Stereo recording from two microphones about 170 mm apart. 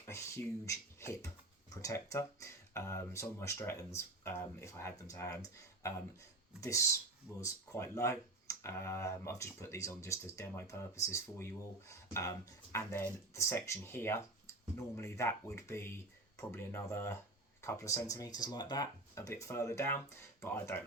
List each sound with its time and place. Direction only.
0.1 s speech: 15° left (ahead or behind)
6.6 s speech: 20° left (ahead or behind)